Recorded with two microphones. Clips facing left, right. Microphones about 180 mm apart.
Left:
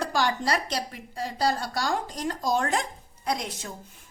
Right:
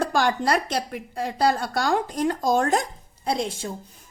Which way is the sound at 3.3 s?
30° right (ahead or behind).